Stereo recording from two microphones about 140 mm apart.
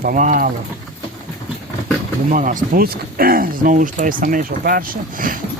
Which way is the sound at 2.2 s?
70° right (ahead or behind).